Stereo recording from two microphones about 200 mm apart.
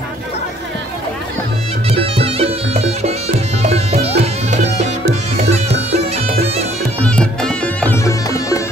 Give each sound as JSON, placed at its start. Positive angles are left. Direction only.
{"t": 1.9, "sound": "music", "side_deg": -30}
{"t": 5.4, "sound": "bagpipes", "side_deg": -30}
{"t": 7.0, "sound": "bagpipes", "side_deg": 5}